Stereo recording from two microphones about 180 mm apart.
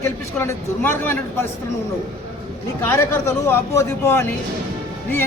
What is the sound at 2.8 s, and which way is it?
A man's voice, 15° left (ahead or behind).